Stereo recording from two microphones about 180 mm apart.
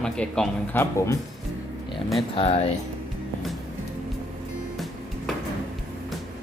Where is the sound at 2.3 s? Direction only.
35° left (ahead or behind).